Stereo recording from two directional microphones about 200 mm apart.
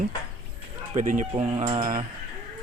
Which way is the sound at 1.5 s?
25° right (ahead or behind).